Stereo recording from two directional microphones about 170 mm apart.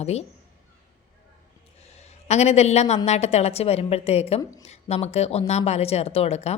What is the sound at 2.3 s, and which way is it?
A woman's voice, 40° left (ahead or behind).